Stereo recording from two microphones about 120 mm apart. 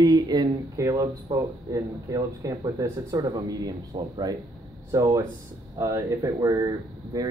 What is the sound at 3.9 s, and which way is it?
Speech, 45° right (ahead or behind).